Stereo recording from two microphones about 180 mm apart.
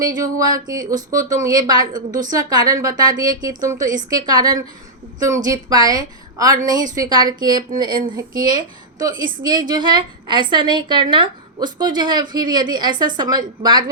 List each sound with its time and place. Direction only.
0.0 s a woman's voice: 20° right (ahead or behind)
0.9 s speech: 50° right (ahead or behind)
1.3 s a woman's voice: 20° right (ahead or behind)